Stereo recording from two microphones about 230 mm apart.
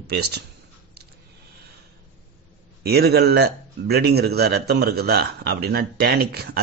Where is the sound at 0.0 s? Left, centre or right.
Right.